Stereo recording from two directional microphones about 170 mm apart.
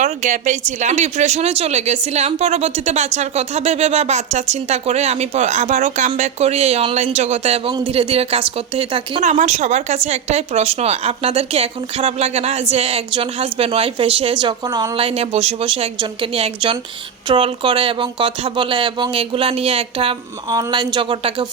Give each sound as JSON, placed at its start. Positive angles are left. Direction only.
{"t": 0.0, "sound": "speech", "side_deg": -45}
{"t": 9.2, "sound": "speech", "side_deg": -45}